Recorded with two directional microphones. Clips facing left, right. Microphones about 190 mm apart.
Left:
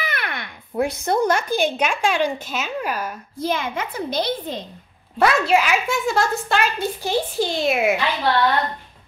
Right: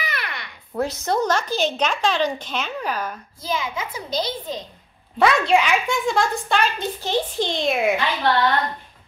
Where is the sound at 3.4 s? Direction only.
60° left (ahead or behind).